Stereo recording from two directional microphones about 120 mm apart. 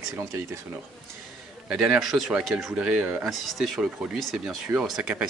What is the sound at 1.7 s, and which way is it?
Speech, 5° right (ahead or behind).